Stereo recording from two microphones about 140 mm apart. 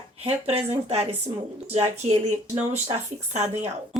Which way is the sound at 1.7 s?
50° right (ahead or behind).